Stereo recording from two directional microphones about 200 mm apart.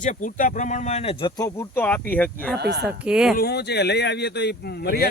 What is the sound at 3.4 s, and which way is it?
Speech, 55° left (ahead or behind).